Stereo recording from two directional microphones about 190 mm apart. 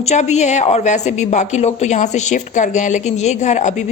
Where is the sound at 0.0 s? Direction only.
35° left (ahead or behind).